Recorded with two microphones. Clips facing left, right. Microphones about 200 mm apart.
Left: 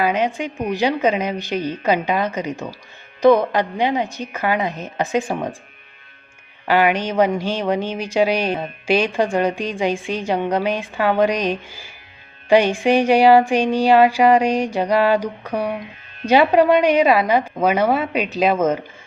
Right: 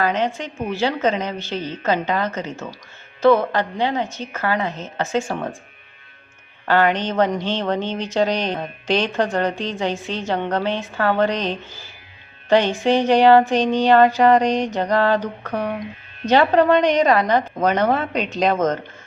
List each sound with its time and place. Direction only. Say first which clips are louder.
0.0 s speech: left 2 dB; 10° left (ahead or behind)
6.7 s speech: left 1 dB; 10° left (ahead or behind)